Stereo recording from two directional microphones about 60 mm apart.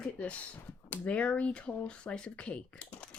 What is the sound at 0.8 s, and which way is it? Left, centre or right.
Speech, left.